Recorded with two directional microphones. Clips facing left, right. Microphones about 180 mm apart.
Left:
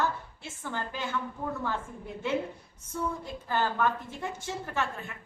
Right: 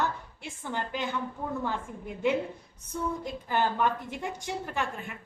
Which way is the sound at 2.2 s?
15° right (ahead or behind).